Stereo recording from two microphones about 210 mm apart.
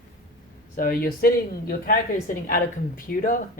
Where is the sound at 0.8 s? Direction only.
45° left (ahead or behind).